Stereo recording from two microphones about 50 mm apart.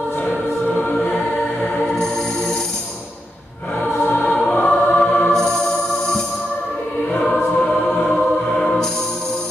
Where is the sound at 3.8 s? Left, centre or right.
Left.